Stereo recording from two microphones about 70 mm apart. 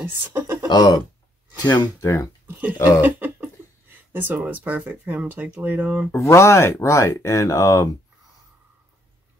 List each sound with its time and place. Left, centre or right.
0.0 s speech: right
0.7 s speech: left
2.0 s speech: left
3.0 s speech: right
6.1 s speech: left